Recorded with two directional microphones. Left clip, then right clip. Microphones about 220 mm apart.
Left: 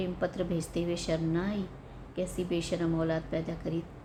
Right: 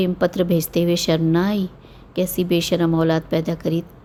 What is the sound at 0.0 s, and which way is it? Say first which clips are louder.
A woman's voice: right 13 dB; 45° right (ahead or behind).